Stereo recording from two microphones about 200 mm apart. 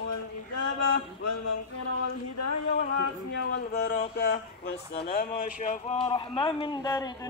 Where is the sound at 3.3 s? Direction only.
60° left (ahead or behind); by 5.9 s 40° left (ahead or behind).